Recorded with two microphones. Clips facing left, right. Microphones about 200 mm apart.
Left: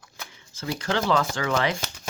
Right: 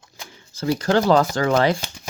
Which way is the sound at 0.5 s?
35° right (ahead or behind).